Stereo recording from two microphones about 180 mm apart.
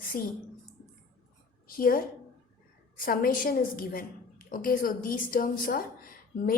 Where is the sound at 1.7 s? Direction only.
50° left (ahead or behind).